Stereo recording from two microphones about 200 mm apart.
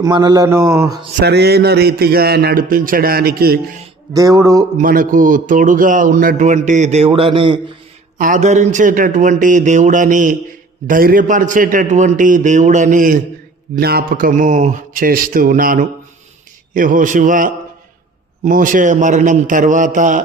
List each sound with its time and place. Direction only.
0.0 s mantra: 20° right (ahead or behind)
1.2 s a man's voice: 55° right (ahead or behind)
4.1 s mantra: 15° right (ahead or behind)
4.8 s a man's voice: 45° right (ahead or behind); by 7.6 s 25° right (ahead or behind)
8.2 s a man's voice: 40° right (ahead or behind)